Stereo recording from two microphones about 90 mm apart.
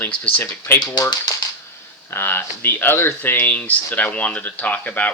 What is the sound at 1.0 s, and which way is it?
Speech, 50° left (ahead or behind).